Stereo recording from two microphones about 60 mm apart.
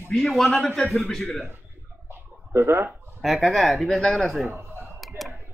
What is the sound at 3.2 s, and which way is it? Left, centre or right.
Speech, centre.